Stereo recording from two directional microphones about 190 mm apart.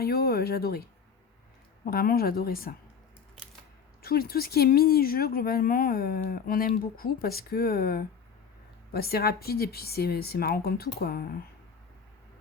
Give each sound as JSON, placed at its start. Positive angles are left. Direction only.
{"t": 0.0, "sound": "speech", "side_deg": 55}
{"t": 4.0, "sound": "a woman's voice", "side_deg": 55}